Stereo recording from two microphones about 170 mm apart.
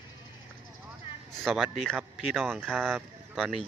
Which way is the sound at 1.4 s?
Centre (ahead or behind).